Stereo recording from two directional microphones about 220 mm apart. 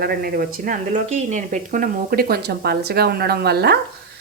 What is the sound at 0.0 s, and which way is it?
Speech, 45° right (ahead or behind).